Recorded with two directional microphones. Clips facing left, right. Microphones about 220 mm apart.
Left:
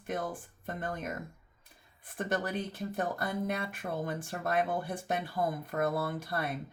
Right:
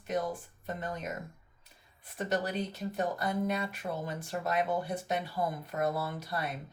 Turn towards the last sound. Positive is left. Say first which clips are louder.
# left 2 dB
turn(degrees=55)  # may be behind; listen again after turning